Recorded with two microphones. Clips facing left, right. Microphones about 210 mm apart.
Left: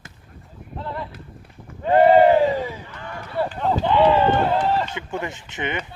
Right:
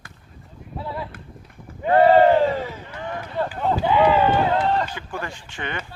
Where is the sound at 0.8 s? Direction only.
10° right (ahead or behind).